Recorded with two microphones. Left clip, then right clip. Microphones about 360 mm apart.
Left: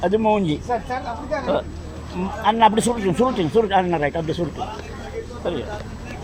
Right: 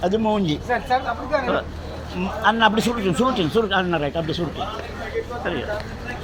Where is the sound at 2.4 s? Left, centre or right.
Centre.